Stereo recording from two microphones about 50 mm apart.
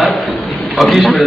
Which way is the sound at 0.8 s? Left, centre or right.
Centre.